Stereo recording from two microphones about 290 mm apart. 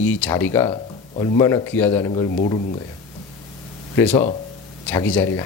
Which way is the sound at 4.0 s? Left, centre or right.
Centre.